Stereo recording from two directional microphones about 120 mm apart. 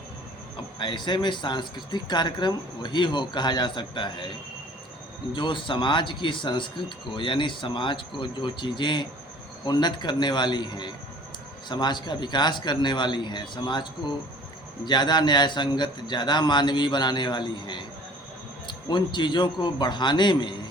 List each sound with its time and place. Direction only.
0.8 s speech: 40° left (ahead or behind)
5.3 s speech: 40° left (ahead or behind)